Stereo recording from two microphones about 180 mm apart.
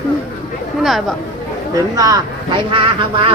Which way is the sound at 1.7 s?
20° right (ahead or behind).